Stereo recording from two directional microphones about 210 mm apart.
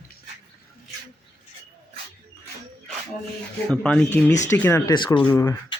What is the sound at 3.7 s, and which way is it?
Speech, 5° left (ahead or behind).